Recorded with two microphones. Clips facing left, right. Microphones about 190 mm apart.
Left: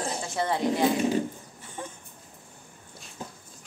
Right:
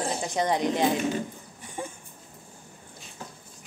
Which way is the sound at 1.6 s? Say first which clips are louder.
Right 3 dB; 10° right (ahead or behind).